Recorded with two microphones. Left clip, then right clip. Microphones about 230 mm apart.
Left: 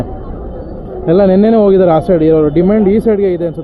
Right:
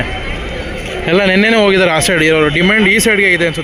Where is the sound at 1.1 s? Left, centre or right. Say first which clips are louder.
Left 2 dB; right.